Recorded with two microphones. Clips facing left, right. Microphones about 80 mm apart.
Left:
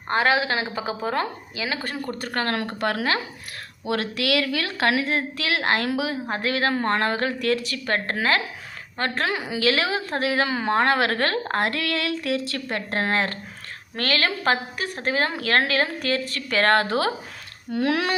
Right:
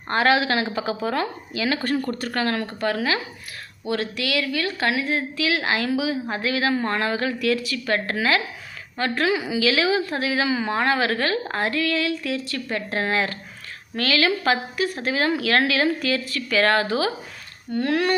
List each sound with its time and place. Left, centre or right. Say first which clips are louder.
0.1 s a woman's voice: right 2 dB; left
1.6 s speech: right 5 dB; centre
2.2 s a woman's voice: right 2 dB; left
2.8 s a woman's voice: right 1 dB; left
3.8 s a woman's voice: left 1 dB; left
7.9 s a woman's voice: even; left
12.7 s a woman's voice: right 1 dB; left
17.7 s speech: even; left